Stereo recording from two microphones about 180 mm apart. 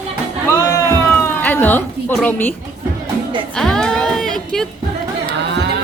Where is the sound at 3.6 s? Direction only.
5° left (ahead or behind).